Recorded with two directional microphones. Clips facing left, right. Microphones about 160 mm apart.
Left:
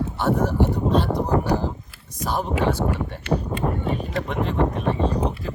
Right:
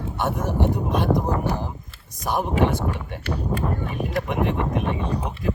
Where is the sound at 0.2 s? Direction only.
15° right (ahead or behind).